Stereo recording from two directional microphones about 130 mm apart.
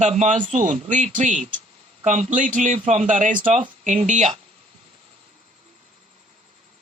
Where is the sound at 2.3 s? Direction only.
80° right; by 4.2 s 60° right (ahead or behind).